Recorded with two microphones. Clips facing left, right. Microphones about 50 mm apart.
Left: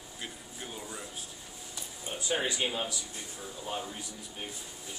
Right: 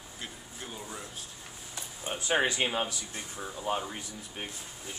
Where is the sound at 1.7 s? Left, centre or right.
Right.